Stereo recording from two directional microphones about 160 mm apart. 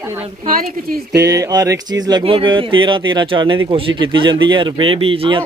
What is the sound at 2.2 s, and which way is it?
Speech, 30° right (ahead or behind).